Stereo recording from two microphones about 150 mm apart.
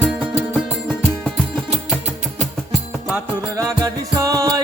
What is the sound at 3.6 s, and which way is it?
Music, 20° right (ahead or behind).